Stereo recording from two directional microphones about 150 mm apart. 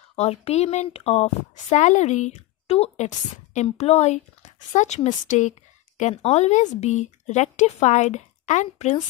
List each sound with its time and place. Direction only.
0.1 s a woman's voice: 45° left (ahead or behind)